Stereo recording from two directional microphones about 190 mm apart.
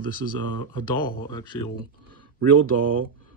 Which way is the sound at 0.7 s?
25° left (ahead or behind).